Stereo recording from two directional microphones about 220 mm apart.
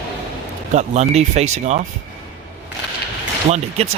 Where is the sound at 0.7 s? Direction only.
30° right (ahead or behind).